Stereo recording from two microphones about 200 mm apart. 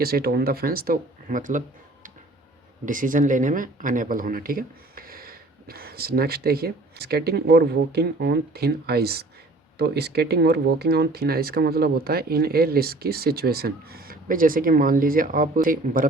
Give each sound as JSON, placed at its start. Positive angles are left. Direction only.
{"t": 0.0, "sound": "speech", "side_deg": -50}
{"t": 2.8, "sound": "speech", "side_deg": -40}